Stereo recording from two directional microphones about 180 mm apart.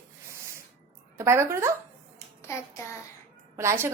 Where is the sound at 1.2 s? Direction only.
15° right (ahead or behind).